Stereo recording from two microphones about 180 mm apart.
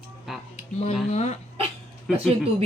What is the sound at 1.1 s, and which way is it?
Speech, 40° left (ahead or behind).